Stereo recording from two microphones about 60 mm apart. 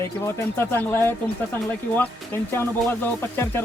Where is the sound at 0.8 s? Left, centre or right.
Left.